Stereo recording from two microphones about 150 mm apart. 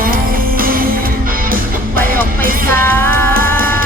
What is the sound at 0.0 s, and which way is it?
Music, 70° right (ahead or behind).